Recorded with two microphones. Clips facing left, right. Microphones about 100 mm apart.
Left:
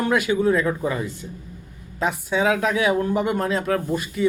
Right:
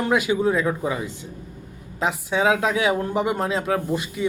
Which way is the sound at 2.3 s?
25° right (ahead or behind).